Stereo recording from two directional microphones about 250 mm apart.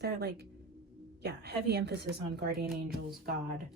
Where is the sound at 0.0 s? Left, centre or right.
Right.